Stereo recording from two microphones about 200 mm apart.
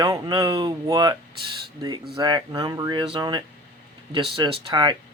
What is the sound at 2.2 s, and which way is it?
Speech, 20° right (ahead or behind).